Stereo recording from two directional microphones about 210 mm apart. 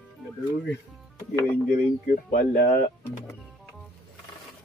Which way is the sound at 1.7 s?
40° left (ahead or behind).